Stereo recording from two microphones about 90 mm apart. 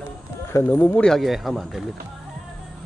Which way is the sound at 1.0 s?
Centre (ahead or behind).